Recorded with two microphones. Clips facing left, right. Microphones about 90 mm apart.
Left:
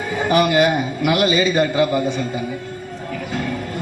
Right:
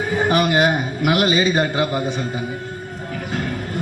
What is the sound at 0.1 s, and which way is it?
A man's voice, 40° right (ahead or behind).